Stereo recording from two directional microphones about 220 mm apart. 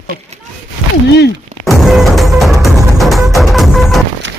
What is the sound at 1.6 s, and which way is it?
Music, centre (ahead or behind).